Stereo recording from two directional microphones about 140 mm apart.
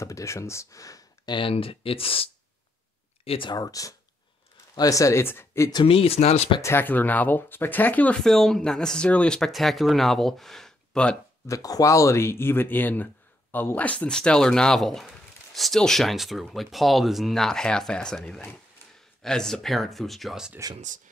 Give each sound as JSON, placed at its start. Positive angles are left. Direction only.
{"t": 0.0, "sound": "speech", "side_deg": 20}
{"t": 3.3, "sound": "speech", "side_deg": 35}
{"t": 5.7, "sound": "speech", "side_deg": 35}
{"t": 6.6, "sound": "speech", "side_deg": 15}
{"t": 11.4, "sound": "speech", "side_deg": 25}